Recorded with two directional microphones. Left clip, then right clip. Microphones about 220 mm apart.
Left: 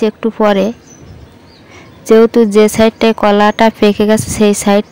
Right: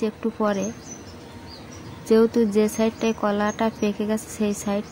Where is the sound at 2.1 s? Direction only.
35° left (ahead or behind).